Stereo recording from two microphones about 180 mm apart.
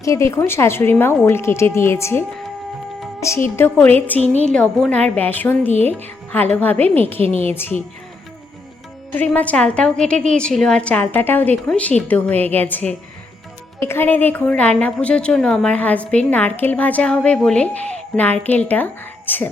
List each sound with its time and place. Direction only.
0.0 s a woman's voice: 15° left (ahead or behind)
7.2 s a woman's voice: 30° right (ahead or behind)
7.4 s a woman's voice: 10° left (ahead or behind)
9.1 s a woman's voice: 10° left (ahead or behind)